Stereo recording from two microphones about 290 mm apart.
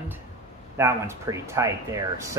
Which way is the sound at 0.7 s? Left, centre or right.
Centre.